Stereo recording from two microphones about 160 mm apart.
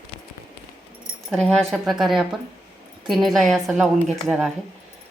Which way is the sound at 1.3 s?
5° left (ahead or behind).